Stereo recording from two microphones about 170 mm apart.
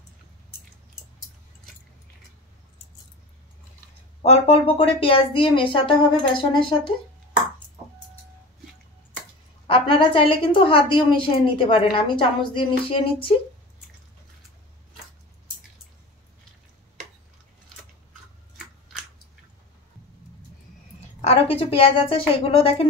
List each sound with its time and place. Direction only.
4.2 s a woman's voice: 35° left (ahead or behind)
9.7 s a woman's voice: 30° left (ahead or behind)
21.2 s a woman's voice: 35° left (ahead or behind)